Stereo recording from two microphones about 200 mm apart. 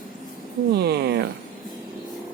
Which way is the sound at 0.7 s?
55° right (ahead or behind).